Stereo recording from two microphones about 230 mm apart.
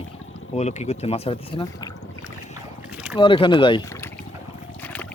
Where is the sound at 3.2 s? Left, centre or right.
Left.